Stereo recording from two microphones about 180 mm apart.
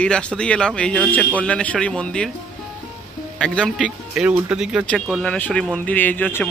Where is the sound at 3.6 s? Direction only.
5° right (ahead or behind).